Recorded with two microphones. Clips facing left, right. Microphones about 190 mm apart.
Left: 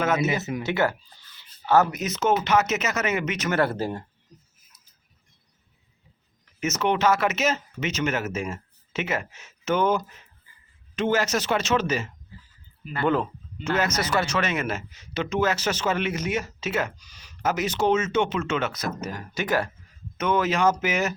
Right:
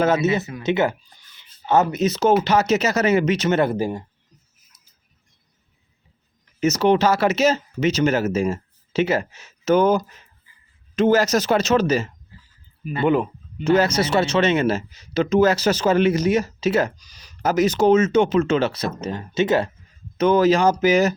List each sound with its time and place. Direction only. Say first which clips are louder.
0.0 s speech: right 5 dB; 30° right (ahead or behind)
6.6 s speech: right 6 dB; 35° right (ahead or behind)
12.8 s speech: right 5 dB; 15° right (ahead or behind)
13.7 s speech: right 5 dB; 30° right (ahead or behind)
20.1 s speech: right 8 dB; 35° right (ahead or behind)